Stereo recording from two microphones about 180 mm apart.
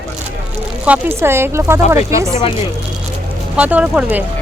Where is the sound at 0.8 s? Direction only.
10° right (ahead or behind).